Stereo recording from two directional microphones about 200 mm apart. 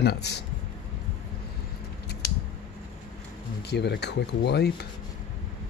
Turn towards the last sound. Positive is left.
turn(degrees=55)  # may be behind; listen again after turning